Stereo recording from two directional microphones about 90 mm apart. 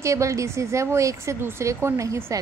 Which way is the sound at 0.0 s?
35° right (ahead or behind).